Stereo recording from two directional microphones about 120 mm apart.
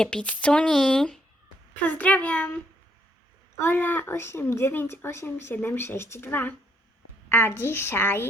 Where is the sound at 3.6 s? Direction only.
15° left (ahead or behind).